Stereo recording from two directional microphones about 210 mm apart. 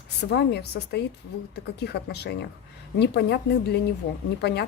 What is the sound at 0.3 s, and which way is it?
Speech, 50° left (ahead or behind).